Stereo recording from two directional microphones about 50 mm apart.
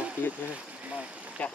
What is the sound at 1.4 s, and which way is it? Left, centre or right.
Speech, left.